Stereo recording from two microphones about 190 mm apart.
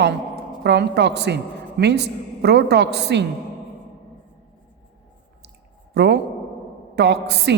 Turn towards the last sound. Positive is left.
turn(degrees=-65)  # may be behind; listen again after turning